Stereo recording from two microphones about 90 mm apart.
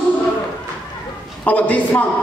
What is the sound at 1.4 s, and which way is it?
Speech, 20° left (ahead or behind).